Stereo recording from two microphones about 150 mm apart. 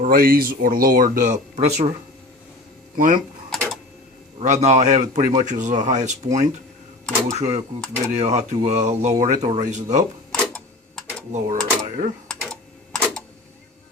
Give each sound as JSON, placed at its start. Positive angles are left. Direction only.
{"t": 0.0, "sound": "speech", "side_deg": -80}
{"t": 2.9, "sound": "speech", "side_deg": -60}
{"t": 3.5, "sound": "printer", "side_deg": 0}
{"t": 4.4, "sound": "a man's voice", "side_deg": -50}
{"t": 11.3, "sound": "speech", "side_deg": -50}
{"t": 12.3, "sound": "typing", "side_deg": 5}